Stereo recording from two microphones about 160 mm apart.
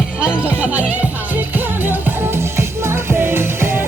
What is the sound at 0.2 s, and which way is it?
Music, 5° right (ahead or behind).